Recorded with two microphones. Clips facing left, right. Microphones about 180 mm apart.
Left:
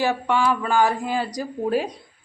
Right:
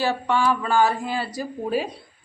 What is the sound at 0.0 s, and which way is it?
Speech, 15° left (ahead or behind).